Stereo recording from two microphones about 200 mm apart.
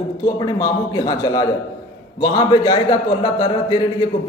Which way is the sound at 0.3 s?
20° left (ahead or behind).